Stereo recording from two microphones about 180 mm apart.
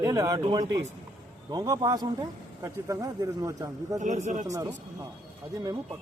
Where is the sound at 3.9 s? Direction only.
45° right (ahead or behind).